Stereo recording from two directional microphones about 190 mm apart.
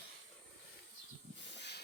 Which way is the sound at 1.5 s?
65° left (ahead or behind).